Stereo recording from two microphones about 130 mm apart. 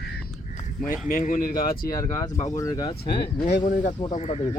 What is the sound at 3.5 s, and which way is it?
Speech, 65° left (ahead or behind).